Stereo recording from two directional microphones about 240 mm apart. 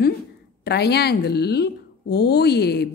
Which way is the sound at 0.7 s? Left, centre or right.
Left.